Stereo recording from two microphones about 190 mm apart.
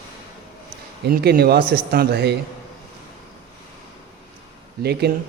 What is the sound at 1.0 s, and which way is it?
A man's voice, 55° right (ahead or behind).